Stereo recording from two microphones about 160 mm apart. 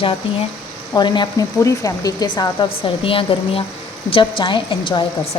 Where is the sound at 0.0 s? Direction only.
35° left (ahead or behind).